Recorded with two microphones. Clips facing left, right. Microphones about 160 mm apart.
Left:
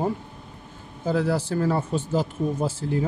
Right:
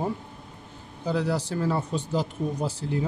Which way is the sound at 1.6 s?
75° left (ahead or behind).